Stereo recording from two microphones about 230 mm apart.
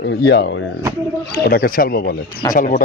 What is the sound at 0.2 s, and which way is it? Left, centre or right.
Speech, left.